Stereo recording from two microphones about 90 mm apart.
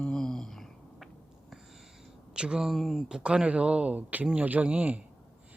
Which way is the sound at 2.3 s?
10° right (ahead or behind).